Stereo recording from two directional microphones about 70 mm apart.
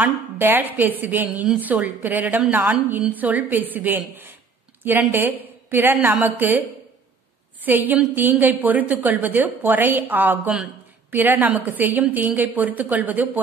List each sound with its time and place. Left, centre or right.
0.0 s a woman's voice: right
7.6 s a woman's voice: right